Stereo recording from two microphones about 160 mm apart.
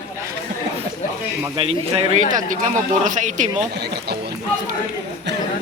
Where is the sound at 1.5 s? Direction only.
35° right (ahead or behind).